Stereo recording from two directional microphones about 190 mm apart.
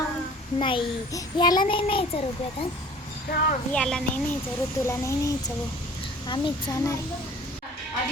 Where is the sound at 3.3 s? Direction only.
50° left (ahead or behind).